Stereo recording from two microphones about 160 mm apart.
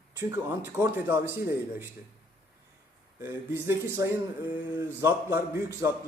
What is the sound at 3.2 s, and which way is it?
A man's voice, 15° right (ahead or behind).